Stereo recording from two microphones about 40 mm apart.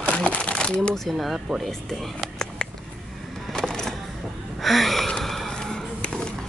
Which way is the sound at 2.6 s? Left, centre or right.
Left.